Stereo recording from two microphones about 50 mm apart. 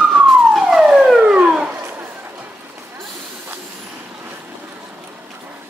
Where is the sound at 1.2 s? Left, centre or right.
Right.